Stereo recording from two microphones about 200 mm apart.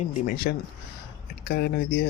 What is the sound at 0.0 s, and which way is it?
Speech, 45° left (ahead or behind).